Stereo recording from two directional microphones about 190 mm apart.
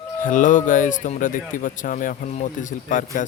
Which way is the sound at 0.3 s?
45° left (ahead or behind).